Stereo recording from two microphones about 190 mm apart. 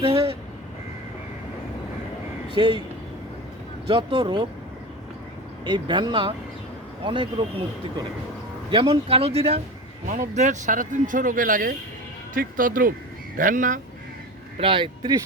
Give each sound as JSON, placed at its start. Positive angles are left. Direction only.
{"t": 0.0, "sound": "speech", "side_deg": -30}
{"t": 2.6, "sound": "speech", "side_deg": -25}
{"t": 3.8, "sound": "speech", "side_deg": -25}
{"t": 5.6, "sound": "speech", "side_deg": -25}
{"t": 8.7, "sound": "speech", "side_deg": -30}
{"t": 14.6, "sound": "speech", "side_deg": -25}